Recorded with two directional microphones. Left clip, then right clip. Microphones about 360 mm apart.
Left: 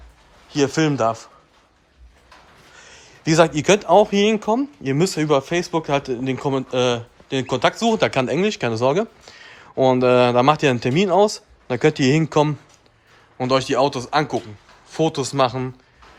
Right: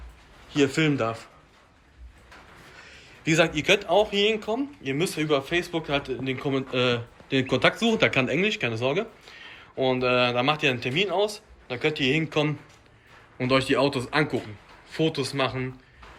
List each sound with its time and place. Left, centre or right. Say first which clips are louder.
0.5 s speech: left 4 dB; centre
3.2 s speech: left 6 dB; centre